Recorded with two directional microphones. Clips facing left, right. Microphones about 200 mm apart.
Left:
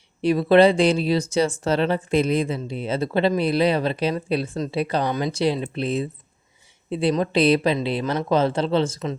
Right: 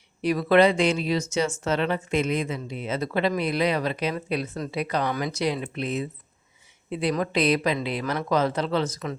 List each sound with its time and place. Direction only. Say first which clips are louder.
0.2 s speech: left 4 dB; 30° left (ahead or behind)